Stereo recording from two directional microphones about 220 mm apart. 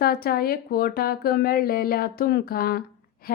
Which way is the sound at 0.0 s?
45° left (ahead or behind).